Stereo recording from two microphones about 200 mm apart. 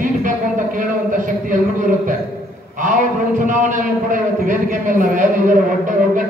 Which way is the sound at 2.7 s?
40° right (ahead or behind).